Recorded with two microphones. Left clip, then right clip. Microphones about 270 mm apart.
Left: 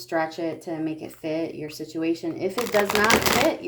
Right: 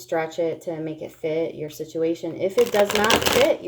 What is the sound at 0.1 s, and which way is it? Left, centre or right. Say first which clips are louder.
Speech: right 2 dB; left.